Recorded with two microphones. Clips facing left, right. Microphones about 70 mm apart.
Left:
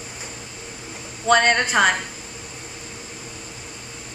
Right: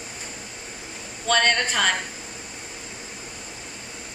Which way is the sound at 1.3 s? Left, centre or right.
Centre.